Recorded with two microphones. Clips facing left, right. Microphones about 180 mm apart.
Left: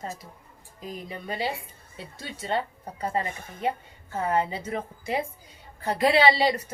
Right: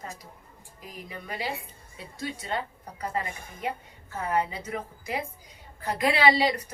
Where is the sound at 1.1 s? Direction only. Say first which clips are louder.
Left 3 dB; 25° left (ahead or behind).